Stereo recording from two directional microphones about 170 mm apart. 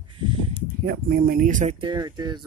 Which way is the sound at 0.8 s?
60° right (ahead or behind).